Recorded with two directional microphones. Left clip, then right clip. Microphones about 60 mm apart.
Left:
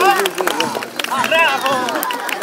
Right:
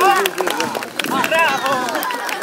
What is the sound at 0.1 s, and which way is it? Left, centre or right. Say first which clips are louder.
Run: even; centre.